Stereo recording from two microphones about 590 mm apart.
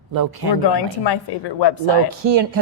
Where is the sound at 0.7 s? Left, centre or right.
Left.